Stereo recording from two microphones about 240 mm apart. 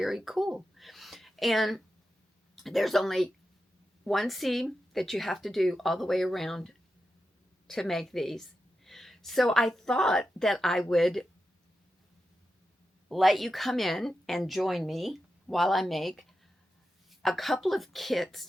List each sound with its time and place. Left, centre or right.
0.0 s a woman's voice: centre
13.1 s speech: centre